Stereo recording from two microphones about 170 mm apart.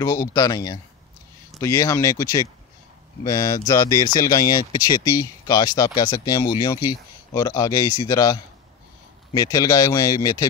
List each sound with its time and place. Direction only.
0.0 s speech: 20° left (ahead or behind)